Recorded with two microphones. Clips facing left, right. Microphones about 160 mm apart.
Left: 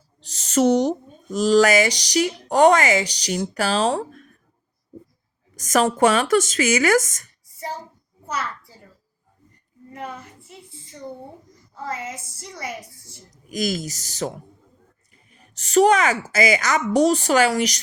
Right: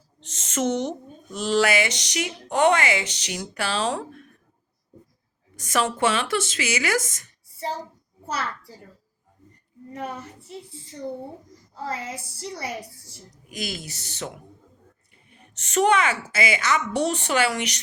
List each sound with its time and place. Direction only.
0.2 s speech: 35° left (ahead or behind)
5.5 s speech: 40° left (ahead or behind)
11.8 s a woman's voice: 30° right (ahead or behind)
13.5 s speech: 40° left (ahead or behind)